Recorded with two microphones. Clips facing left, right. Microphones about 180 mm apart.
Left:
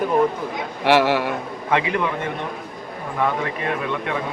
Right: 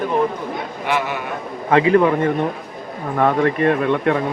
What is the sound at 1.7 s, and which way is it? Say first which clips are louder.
Speech: right 8 dB; 45° right (ahead or behind).